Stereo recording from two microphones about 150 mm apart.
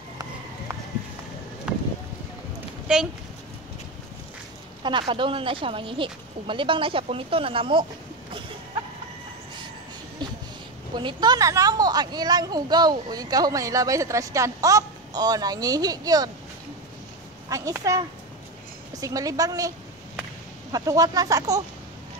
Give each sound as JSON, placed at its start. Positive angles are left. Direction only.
{"t": 1.7, "sound": "a sound", "side_deg": -5}
{"t": 2.9, "sound": "speech", "side_deg": -5}
{"t": 4.8, "sound": "speech", "side_deg": -30}
{"t": 11.0, "sound": "speech", "side_deg": -30}
{"t": 17.5, "sound": "speech", "side_deg": -20}
{"t": 20.7, "sound": "speech", "side_deg": -25}